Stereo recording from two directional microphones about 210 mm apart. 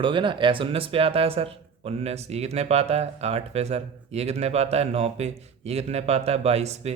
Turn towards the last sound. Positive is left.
turn(degrees=-30)  # may be behind; listen again after turning